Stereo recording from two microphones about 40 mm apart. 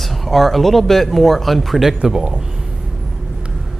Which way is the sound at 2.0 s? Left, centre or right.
Centre.